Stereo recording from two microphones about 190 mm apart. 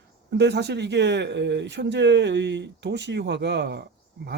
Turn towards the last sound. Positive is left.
turn(degrees=-65)  # may be behind; listen again after turning